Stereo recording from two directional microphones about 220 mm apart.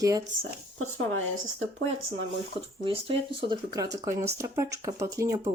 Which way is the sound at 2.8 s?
25° right (ahead or behind).